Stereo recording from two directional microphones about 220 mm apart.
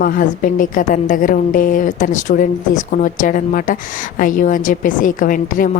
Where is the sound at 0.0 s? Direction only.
40° left (ahead or behind).